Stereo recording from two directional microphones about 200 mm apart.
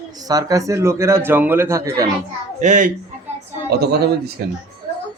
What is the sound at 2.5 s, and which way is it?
Speech, 40° right (ahead or behind).